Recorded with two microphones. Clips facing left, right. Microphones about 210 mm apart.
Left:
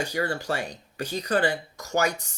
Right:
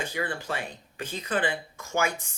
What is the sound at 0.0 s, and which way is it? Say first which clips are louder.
Speech: left 4 dB; 40° left (ahead or behind).